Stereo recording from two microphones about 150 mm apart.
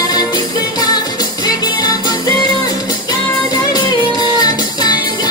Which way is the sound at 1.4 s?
25° left (ahead or behind).